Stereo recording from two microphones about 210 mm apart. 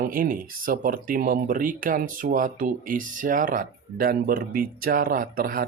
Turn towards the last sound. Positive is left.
turn(degrees=-45)  # may be behind; listen again after turning